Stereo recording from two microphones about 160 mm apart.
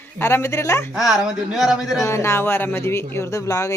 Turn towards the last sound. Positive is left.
turn(degrees=20)  # may be behind; listen again after turning